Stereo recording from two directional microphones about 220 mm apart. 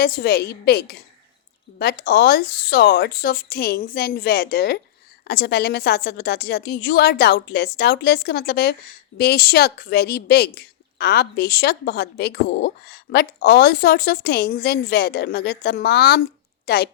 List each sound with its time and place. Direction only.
0.0 s a woman's voice: 45° left (ahead or behind)